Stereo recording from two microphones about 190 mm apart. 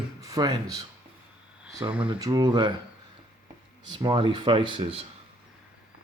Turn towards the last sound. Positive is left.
turn(degrees=-30)  # may be behind; listen again after turning